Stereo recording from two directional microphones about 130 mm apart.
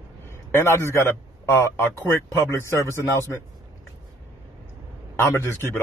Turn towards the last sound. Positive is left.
turn(degrees=20)  # may be behind; listen again after turning